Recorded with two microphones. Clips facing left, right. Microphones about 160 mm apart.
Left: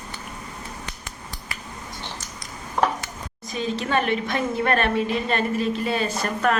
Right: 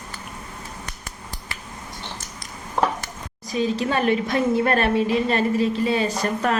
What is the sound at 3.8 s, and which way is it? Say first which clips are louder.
A woman's voice: left 1 dB; 35° right (ahead or behind).